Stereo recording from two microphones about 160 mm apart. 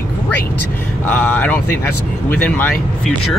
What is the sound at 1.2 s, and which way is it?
Speech, 10° left (ahead or behind).